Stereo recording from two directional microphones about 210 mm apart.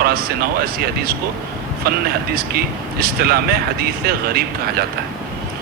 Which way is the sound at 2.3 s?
45° right (ahead or behind).